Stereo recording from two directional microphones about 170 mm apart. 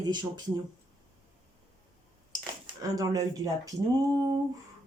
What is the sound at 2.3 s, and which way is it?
Cutlery, 20° right (ahead or behind).